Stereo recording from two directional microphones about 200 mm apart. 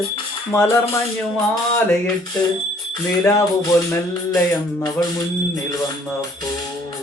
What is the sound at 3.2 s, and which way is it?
Music, 15° left (ahead or behind).